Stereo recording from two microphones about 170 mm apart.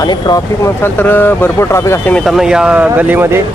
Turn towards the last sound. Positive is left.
turn(degrees=-15)  # may be behind; listen again after turning